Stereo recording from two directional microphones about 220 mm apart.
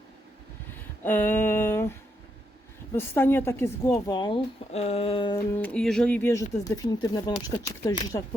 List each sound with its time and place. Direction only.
1.0 s a woman's voice: 10° left (ahead or behind)
5.5 s a woman's voice: 5° left (ahead or behind)